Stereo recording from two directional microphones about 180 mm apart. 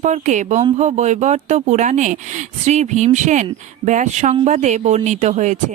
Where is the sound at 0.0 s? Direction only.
40° right (ahead or behind).